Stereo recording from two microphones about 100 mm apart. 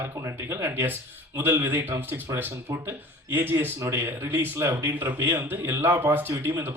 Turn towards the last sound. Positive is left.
turn(degrees=-25)  # may be behind; listen again after turning